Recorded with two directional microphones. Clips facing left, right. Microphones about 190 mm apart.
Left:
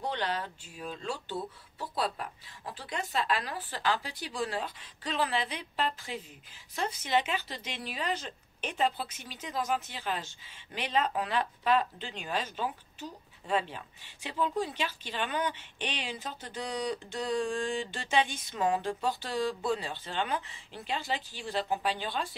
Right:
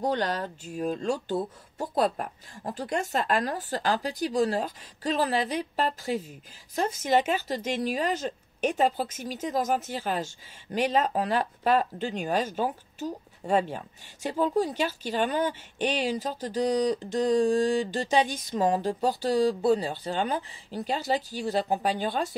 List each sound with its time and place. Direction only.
0.0 s speech: 45° right (ahead or behind)